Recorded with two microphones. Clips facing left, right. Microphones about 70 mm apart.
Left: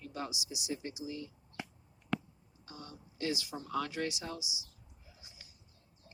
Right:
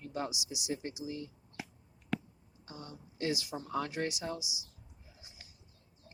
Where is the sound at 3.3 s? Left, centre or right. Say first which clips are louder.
Right 1 dB; right.